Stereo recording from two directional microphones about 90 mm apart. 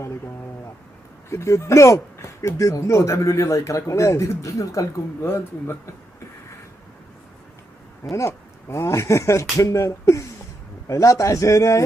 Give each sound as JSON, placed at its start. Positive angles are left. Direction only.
{"t": 1.3, "sound": "speech", "side_deg": 35}
{"t": 8.1, "sound": "speech", "side_deg": 30}